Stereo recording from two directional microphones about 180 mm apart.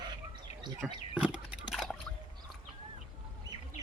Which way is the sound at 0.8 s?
Centre (ahead or behind).